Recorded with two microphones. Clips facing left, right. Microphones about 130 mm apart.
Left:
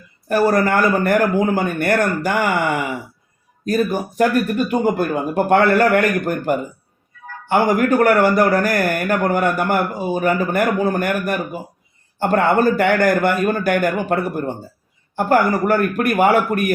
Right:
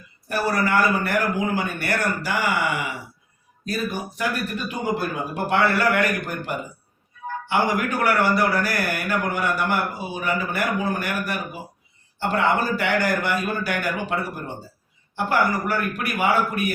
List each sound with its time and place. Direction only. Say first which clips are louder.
0.3 s a man's voice: left 7 dB; 45° left (ahead or behind)